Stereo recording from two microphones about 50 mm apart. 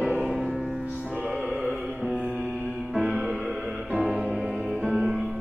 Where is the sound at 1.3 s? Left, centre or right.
Centre.